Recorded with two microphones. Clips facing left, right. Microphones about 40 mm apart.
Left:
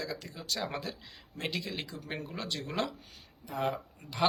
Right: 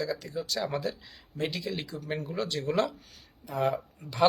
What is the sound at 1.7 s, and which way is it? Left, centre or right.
Speech, centre.